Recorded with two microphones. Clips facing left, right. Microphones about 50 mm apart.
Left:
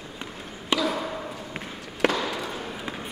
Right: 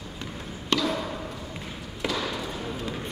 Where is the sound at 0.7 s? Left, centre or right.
Centre.